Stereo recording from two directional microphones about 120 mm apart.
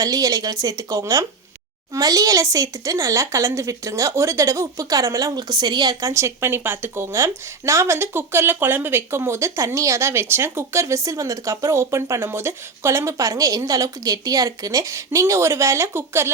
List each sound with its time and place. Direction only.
0.0 s speech: 30° right (ahead or behind)